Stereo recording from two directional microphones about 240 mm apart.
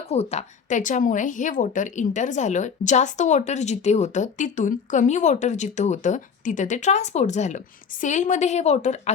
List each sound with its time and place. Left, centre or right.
0.1 s a woman's voice: left